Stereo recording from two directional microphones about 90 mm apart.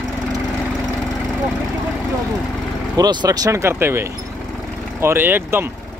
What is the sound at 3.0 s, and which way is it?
Speech, 45° right (ahead or behind).